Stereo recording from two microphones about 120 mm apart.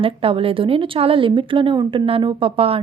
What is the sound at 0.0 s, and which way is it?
Speech, 50° right (ahead or behind).